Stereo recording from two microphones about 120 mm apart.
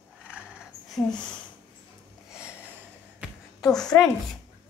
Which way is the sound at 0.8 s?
Centre (ahead or behind).